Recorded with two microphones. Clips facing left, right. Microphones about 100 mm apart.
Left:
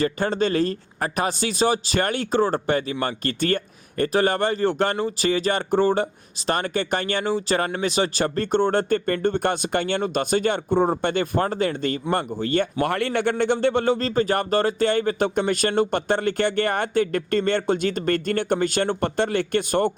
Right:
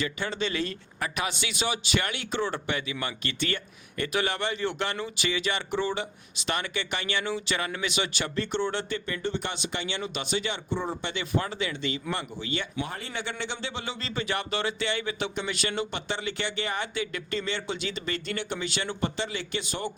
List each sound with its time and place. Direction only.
0.0 s a man's voice: 45° left (ahead or behind)
12.9 s a man's voice: 65° left (ahead or behind)